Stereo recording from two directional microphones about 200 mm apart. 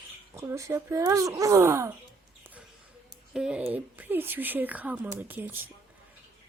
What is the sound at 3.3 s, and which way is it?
A woman's voice, 5° right (ahead or behind).